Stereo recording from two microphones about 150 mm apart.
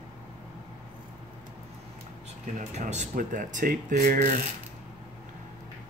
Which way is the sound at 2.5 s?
55° right (ahead or behind).